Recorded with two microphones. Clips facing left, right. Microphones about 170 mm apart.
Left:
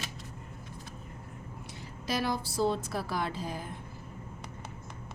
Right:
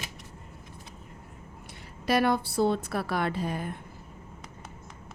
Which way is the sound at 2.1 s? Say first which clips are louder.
Right 7 dB; 60° right (ahead or behind).